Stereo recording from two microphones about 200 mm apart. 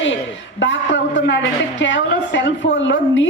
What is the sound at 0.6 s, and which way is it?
A woman's voice, 65° left (ahead or behind).